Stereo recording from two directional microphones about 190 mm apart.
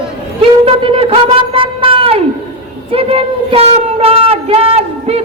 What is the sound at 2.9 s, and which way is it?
Speech, 30° right (ahead or behind).